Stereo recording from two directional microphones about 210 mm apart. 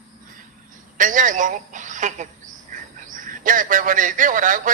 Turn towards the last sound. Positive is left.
turn(degrees=-40)  # may be behind; listen again after turning